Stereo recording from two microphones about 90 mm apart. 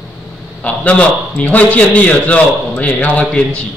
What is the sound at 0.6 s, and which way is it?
A man's voice, 15° left (ahead or behind).